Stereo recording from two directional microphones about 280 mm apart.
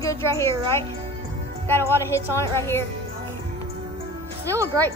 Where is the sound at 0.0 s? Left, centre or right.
Centre.